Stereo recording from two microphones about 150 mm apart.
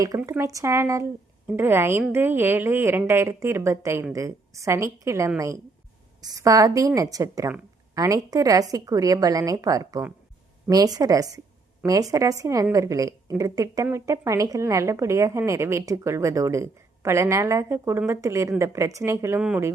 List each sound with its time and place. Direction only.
0.2 s a woman's voice: 20° right (ahead or behind)
19.4 s speech: 5° right (ahead or behind)